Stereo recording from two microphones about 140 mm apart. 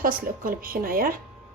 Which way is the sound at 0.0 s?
90° right.